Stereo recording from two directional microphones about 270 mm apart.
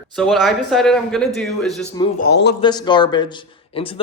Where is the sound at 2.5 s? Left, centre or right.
Centre.